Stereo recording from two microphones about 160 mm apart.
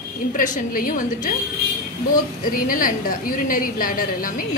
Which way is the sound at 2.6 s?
60° left (ahead or behind).